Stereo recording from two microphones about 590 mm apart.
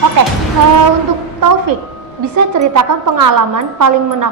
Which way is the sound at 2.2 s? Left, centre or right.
Right.